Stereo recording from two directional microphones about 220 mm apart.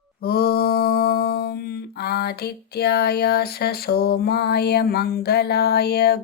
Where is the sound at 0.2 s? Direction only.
45° left (ahead or behind).